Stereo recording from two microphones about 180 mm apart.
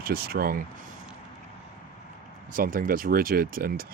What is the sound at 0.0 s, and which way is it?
Speech, 55° right (ahead or behind).